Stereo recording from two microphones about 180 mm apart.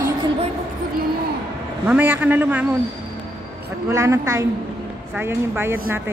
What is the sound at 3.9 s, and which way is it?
A woman's voice, 15° right (ahead or behind).